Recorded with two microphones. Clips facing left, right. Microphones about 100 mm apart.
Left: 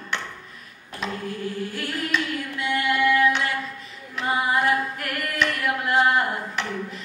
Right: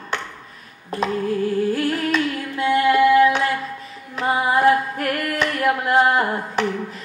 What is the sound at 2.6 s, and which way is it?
Singing, 35° right (ahead or behind).